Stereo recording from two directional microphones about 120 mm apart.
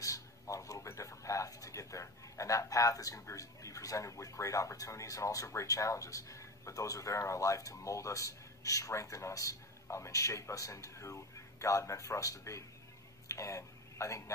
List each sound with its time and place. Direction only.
0.0 s a man's voice: 30° left (ahead or behind)